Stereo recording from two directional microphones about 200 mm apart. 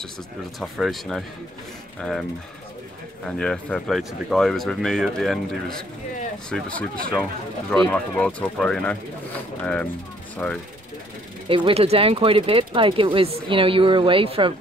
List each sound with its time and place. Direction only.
0.6 s speech: centre (ahead or behind)
3.3 s speech: 5° left (ahead or behind)
7.7 s speech: 5° left (ahead or behind)
11.4 s speech: 25° right (ahead or behind)